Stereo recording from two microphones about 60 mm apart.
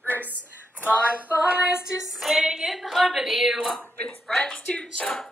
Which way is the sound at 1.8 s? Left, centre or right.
Centre.